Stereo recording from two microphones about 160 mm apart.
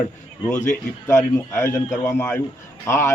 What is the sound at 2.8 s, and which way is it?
Speech, 15° left (ahead or behind).